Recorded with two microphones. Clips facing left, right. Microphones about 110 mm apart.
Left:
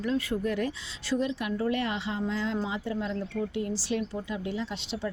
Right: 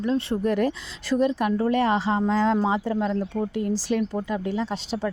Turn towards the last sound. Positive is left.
turn(degrees=-40)  # may be behind; listen again after turning